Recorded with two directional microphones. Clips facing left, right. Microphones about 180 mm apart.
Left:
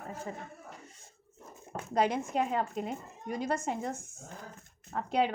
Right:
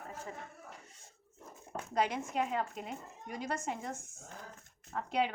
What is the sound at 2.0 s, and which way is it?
A woman's voice, 35° left (ahead or behind).